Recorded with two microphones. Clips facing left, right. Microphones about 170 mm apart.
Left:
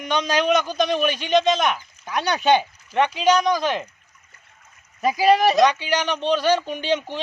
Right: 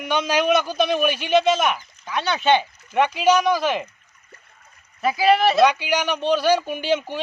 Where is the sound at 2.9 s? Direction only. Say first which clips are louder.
Right 1 dB; 10° right (ahead or behind).